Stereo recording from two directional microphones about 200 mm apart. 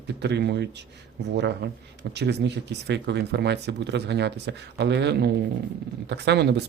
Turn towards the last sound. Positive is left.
turn(degrees=-55)  # may be behind; listen again after turning